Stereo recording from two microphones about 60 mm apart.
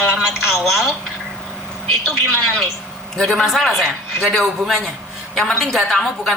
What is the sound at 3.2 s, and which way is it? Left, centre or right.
Speech, centre.